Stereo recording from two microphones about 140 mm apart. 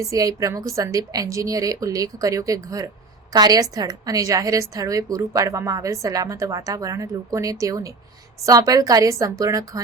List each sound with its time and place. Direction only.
0.0 s a woman's voice: 25° right (ahead or behind)